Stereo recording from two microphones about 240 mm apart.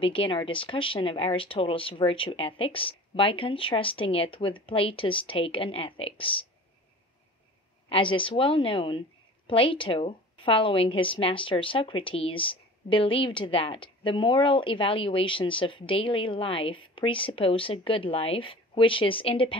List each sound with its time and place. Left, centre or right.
0.0 s a woman's voice: left
7.9 s a woman's voice: left